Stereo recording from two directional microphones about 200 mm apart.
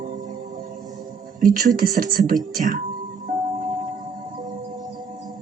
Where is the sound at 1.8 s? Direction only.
50° right (ahead or behind).